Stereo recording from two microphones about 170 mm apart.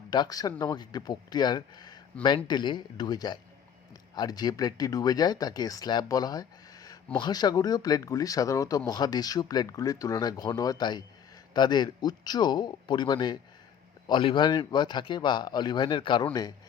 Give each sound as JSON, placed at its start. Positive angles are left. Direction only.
{"t": 0.1, "sound": "speech", "side_deg": 25}